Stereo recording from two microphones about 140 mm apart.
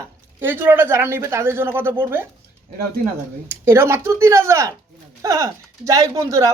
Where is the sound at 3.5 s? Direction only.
15° right (ahead or behind).